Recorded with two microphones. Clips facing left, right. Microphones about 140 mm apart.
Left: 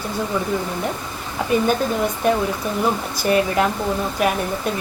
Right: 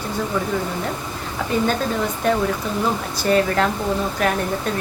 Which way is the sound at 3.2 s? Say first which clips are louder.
Even; 15° left (ahead or behind).